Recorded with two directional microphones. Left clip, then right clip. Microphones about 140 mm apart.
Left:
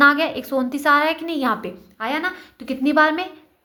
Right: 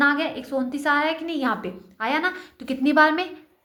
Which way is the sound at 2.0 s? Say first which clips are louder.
Even; 5° left (ahead or behind).